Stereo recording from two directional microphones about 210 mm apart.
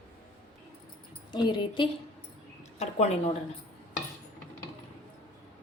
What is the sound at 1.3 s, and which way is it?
A woman's voice, 20° left (ahead or behind).